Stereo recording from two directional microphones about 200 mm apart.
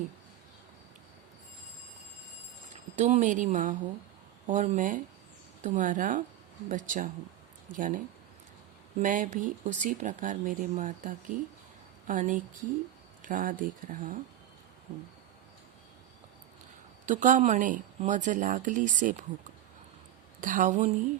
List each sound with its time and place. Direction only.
3.0 s speech: 35° right (ahead or behind)
17.1 s speech: 40° right (ahead or behind)
20.4 s speech: 40° right (ahead or behind)